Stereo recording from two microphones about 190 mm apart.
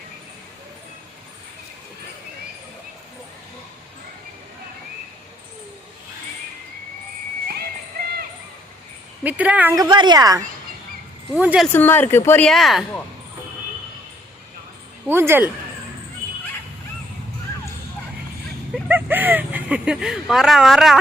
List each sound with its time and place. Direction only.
9.2 s speech: 10° right (ahead or behind)
9.9 s a woman's voice: 25° right (ahead or behind)
11.3 s speech: 5° right (ahead or behind)
11.7 s speech: 10° left (ahead or behind)
15.0 s speech: 10° right (ahead or behind)
18.7 s a sound: 10° right (ahead or behind)